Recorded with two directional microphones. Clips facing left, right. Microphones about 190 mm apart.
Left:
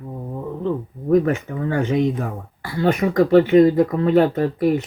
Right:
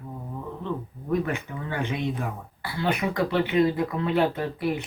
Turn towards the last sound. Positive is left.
turn(degrees=45)  # may be behind; listen again after turning